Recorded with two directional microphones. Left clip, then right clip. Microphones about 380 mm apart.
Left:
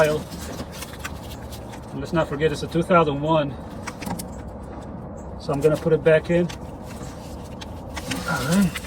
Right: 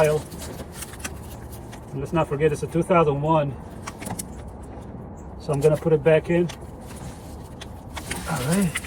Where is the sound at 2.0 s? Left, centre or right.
Centre.